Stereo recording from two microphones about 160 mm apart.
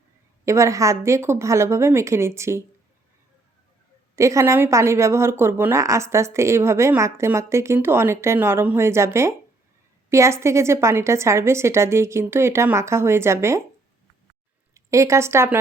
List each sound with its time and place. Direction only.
0.4 s a woman's voice: 20° right (ahead or behind)
4.1 s a woman's voice: 20° right (ahead or behind)
14.7 s speech: 20° right (ahead or behind)